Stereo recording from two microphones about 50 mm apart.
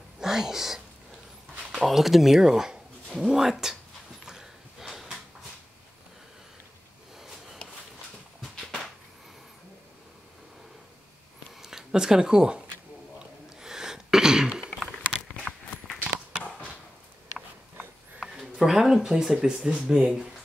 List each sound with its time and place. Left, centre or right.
0.2 s speech: centre
1.9 s speech: centre
4.3 s snort: centre
8.4 s a sound: centre
11.6 s speech: centre
13.6 s throat clearing: centre
15.3 s biting: left
16.0 s a sound: right
18.4 s speech: centre